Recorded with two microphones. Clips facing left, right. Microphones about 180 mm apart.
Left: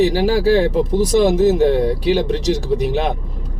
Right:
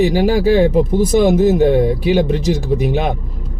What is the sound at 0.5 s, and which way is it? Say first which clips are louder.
Speech: right 3 dB; 50° right (ahead or behind).